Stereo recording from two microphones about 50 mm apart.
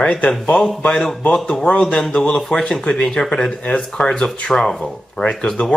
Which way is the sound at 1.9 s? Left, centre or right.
Centre.